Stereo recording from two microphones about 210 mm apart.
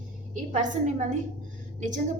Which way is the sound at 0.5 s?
35° right (ahead or behind).